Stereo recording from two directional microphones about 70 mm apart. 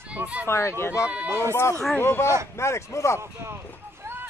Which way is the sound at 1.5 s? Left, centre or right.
Left.